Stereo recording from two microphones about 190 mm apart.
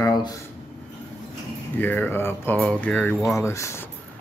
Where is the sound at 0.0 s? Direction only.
20° left (ahead or behind).